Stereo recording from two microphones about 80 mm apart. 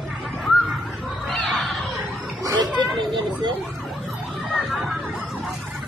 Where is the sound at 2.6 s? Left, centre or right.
Right.